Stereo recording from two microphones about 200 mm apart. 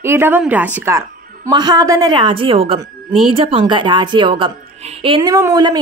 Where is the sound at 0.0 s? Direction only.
10° right (ahead or behind).